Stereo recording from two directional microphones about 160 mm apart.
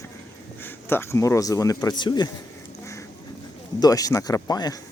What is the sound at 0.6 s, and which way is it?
A man's voice, 15° left (ahead or behind).